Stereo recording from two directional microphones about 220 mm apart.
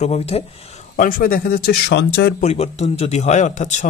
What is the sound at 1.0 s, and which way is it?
Speech, 40° left (ahead or behind).